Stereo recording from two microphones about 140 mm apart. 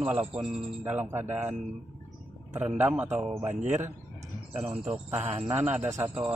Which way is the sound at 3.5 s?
60° right (ahead or behind).